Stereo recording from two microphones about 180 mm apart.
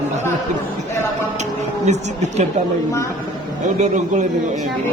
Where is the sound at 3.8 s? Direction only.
40° right (ahead or behind).